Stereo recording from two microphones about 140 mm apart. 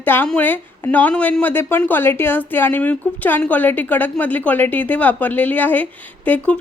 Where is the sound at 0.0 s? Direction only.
15° left (ahead or behind).